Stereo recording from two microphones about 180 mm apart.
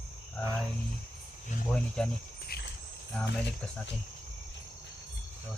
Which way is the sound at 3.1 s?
5° left (ahead or behind).